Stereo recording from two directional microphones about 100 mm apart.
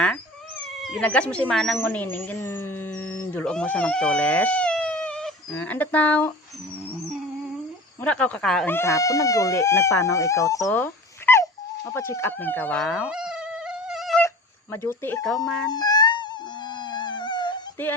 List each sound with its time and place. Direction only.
0.8 s cat: centre (ahead or behind)
1.0 s speech: 10° left (ahead or behind)
1.8 s speech: 15° left (ahead or behind)
3.4 s speech: 10° left (ahead or behind)
8.0 s speech: 15° left (ahead or behind)
8.6 s speech: 25° left (ahead or behind)
11.3 s dog: 20° left (ahead or behind)
11.9 s speech: 30° left (ahead or behind)
13.1 s cat: 5° right (ahead or behind)
14.3 s a sound: 25° left (ahead or behind)
15.4 s speech: 5° left (ahead or behind)
15.7 s mosquito: 45° left (ahead or behind)